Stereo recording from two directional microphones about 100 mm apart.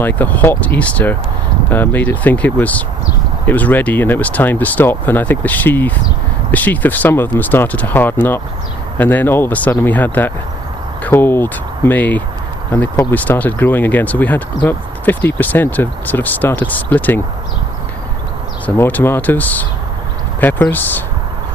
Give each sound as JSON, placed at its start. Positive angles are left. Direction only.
{"t": 0.0, "sound": "speech", "side_deg": 15}
{"t": 18.6, "sound": "speech", "side_deg": 15}